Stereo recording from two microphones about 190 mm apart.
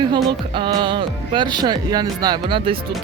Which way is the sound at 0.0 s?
25° right (ahead or behind).